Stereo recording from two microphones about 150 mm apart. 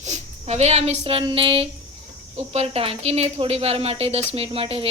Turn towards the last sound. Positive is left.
turn(degrees=-40)  # may be behind; listen again after turning